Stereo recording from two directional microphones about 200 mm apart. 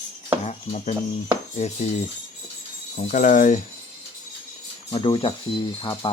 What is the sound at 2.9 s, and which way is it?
Speech, 40° left (ahead or behind).